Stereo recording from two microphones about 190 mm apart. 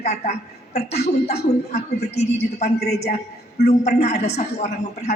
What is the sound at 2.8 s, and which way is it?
Speech, 60° left (ahead or behind).